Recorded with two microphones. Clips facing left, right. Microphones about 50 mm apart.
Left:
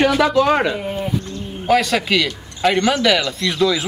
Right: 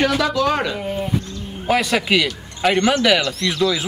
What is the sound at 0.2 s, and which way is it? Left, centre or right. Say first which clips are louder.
Speech: left 4 dB; left.